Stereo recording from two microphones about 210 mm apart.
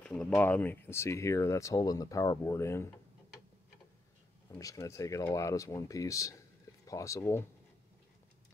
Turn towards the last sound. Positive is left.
turn(degrees=15)  # may be behind; listen again after turning